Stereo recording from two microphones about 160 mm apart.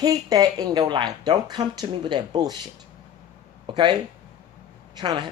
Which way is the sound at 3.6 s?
30° right (ahead or behind).